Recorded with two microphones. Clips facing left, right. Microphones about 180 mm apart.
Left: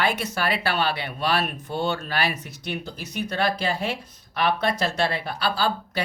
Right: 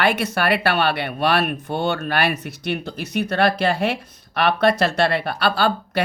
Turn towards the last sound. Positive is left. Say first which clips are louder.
# right 5 dB
turn(degrees=-65)  # may be behind; listen again after turning